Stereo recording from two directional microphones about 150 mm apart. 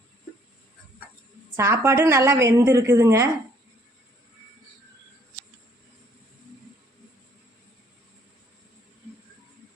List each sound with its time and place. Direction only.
1.5 s a woman's voice: 15° right (ahead or behind)